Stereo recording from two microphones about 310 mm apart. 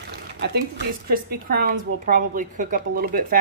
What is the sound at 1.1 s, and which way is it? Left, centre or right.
Speech, right.